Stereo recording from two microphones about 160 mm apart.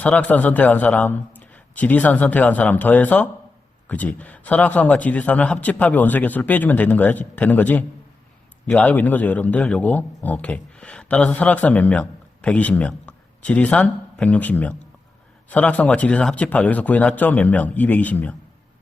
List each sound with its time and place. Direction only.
0.0 s a man's voice: 10° left (ahead or behind)